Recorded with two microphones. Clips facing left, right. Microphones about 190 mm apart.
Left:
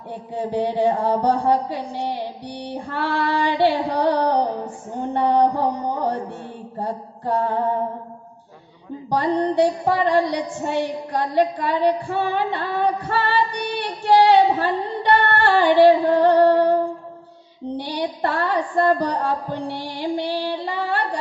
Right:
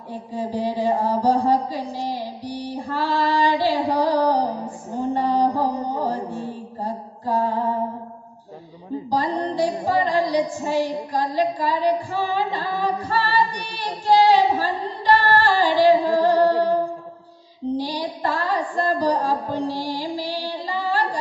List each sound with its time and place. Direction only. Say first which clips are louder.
0.3 s a sound: left 2 dB; 65° left (ahead or behind)
5.1 s mantra: left 3 dB; 65° left (ahead or behind)
9.1 s female singing: left 4 dB; 65° left (ahead or behind)
17.7 s music: left 3 dB; 65° left (ahead or behind)